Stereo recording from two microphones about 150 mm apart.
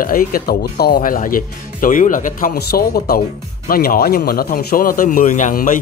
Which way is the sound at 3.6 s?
75° left (ahead or behind).